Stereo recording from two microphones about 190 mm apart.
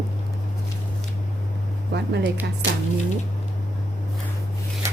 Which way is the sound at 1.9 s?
60° right (ahead or behind).